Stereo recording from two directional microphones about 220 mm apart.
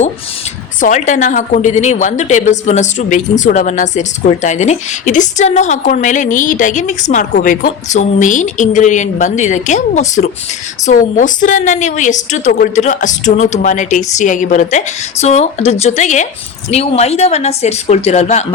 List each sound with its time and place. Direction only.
0.8 s a woman's voice: 35° left (ahead or behind)